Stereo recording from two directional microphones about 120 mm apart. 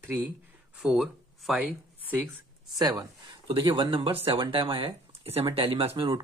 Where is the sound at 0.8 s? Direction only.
5° right (ahead or behind).